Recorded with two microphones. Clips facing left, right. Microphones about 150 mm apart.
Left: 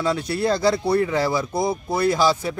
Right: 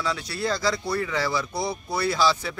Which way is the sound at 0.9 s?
30° left (ahead or behind).